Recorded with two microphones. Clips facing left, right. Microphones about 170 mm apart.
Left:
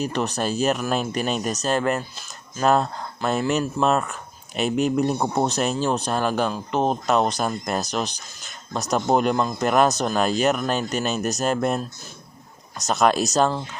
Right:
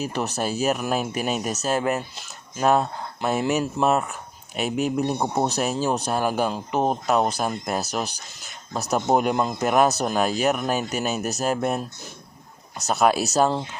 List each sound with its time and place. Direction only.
0.0 s speech: 10° right (ahead or behind)
9.3 s speech: 20° right (ahead or behind)
9.6 s speech: 5° right (ahead or behind)
12.9 s speech: 5° right (ahead or behind)